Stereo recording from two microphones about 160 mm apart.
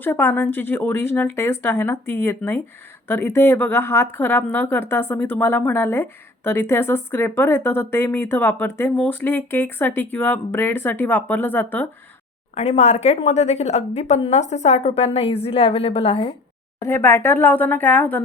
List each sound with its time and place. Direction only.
0.0 s speech: 15° left (ahead or behind)
12.5 s a woman's voice: 40° left (ahead or behind)
16.8 s speech: 15° left (ahead or behind)